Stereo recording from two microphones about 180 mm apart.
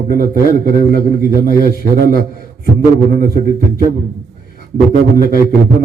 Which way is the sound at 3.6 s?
55° left (ahead or behind).